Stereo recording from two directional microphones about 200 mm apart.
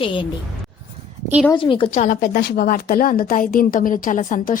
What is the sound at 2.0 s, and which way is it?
A woman's voice, 40° left (ahead or behind).